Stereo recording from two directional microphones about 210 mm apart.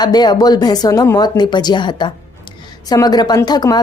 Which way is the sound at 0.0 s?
20° left (ahead or behind).